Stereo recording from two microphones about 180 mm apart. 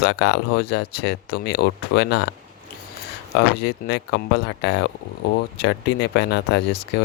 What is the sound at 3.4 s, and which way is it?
Speech, 70° left (ahead or behind).